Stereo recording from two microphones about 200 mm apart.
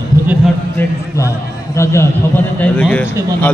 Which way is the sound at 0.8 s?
10° left (ahead or behind).